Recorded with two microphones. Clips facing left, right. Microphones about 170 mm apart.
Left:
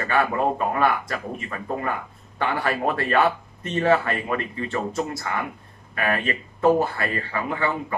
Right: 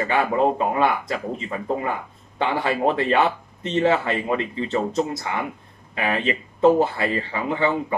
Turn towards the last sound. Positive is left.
turn(degrees=-20)  # may be behind; listen again after turning